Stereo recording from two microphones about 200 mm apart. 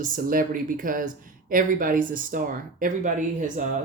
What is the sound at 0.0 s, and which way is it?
Speech, 45° right (ahead or behind).